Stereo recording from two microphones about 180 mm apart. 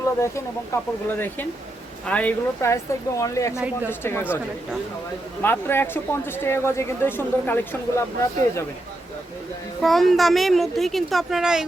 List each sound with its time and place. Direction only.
0.2 s speech: 15° left (ahead or behind)
2.0 s speech: 10° left (ahead or behind)
5.4 s speech: 10° left (ahead or behind)
9.8 s a woman's voice: centre (ahead or behind)